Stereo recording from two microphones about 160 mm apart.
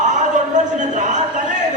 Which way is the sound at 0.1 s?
50° right (ahead or behind).